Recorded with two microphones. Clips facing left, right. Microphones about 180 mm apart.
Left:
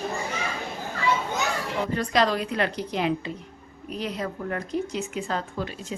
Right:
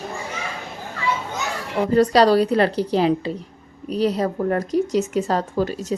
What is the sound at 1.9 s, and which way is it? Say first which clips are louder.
Speech: right 10 dB; 35° right (ahead or behind).